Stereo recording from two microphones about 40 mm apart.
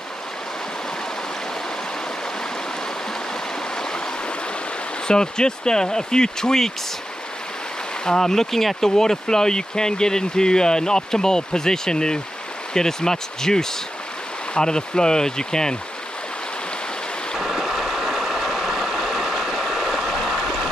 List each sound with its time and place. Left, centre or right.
5.0 s speech: centre
8.0 s speech: centre
17.4 s stream: centre
20.2 s a sound: centre